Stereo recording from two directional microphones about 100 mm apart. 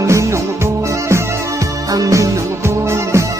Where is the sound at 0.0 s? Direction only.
30° right (ahead or behind).